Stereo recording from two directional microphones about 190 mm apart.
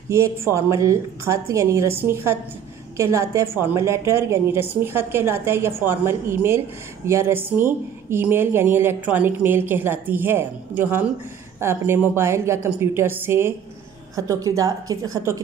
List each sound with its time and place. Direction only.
0.1 s a woman's voice: 15° right (ahead or behind)